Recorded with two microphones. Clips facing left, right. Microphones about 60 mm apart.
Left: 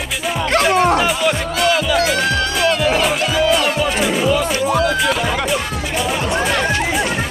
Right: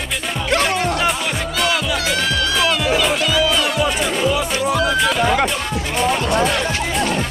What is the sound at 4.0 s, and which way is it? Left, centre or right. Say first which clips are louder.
Music: left 2 dB; centre.